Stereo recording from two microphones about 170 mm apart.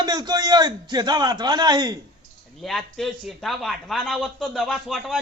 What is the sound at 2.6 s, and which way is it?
A man's voice, centre (ahead or behind).